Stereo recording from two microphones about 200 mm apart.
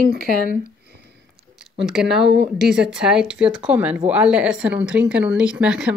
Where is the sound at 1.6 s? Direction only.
Centre (ahead or behind).